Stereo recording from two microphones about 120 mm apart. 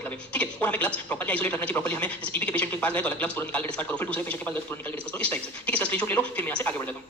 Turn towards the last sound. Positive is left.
turn(degrees=10)  # may be behind; listen again after turning